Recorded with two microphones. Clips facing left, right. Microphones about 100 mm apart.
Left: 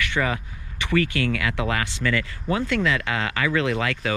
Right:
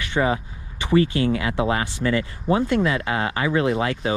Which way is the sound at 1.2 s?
30° right (ahead or behind).